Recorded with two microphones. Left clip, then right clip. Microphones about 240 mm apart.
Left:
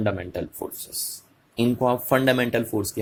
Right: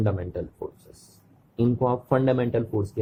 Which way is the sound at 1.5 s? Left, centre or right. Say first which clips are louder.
Left 2 dB; centre.